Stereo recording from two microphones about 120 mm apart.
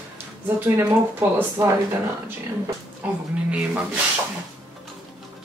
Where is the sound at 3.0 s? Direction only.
10° right (ahead or behind).